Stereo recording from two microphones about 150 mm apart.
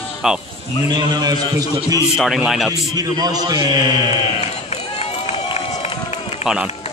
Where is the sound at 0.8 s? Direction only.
30° right (ahead or behind).